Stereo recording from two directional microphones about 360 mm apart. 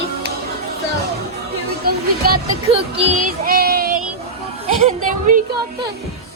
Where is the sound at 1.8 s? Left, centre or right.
Right.